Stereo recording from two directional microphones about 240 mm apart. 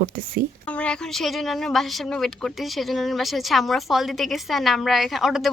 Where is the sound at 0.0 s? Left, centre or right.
Right.